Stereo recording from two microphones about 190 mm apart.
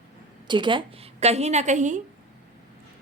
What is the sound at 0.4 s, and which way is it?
A woman's voice, 25° right (ahead or behind).